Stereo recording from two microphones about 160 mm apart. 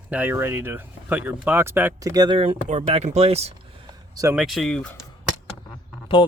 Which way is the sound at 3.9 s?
20° right (ahead or behind).